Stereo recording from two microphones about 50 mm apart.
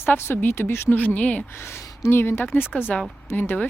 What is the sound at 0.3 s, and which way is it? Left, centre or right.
Speech, left.